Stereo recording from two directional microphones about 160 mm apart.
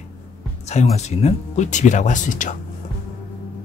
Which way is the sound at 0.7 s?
45° left (ahead or behind).